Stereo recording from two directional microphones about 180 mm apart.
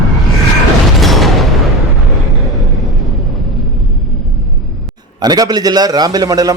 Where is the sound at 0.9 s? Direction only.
Centre (ahead or behind).